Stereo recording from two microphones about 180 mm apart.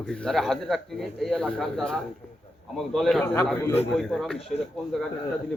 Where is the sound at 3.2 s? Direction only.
15° left (ahead or behind).